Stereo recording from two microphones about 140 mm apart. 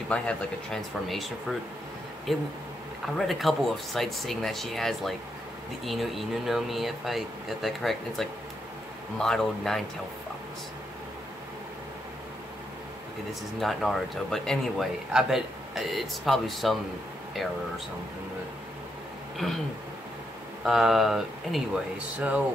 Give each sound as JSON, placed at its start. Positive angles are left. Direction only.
{"t": 0.1, "sound": "speech", "side_deg": 5}
{"t": 13.3, "sound": "speech", "side_deg": 0}
{"t": 19.4, "sound": "speech", "side_deg": 0}
{"t": 20.6, "sound": "speech", "side_deg": 0}